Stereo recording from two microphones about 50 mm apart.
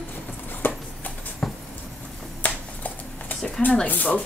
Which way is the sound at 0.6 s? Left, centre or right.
Left.